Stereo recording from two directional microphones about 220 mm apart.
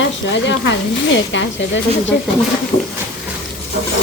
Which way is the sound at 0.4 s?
55° left (ahead or behind).